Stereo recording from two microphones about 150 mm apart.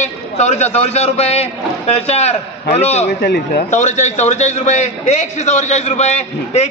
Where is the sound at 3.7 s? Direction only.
55° left (ahead or behind).